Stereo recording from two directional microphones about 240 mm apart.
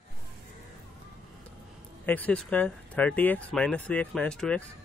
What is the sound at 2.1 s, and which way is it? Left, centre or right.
Speech, centre.